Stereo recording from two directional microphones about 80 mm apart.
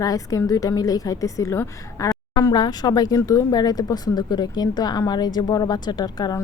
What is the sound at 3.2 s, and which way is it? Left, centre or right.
Speech, left.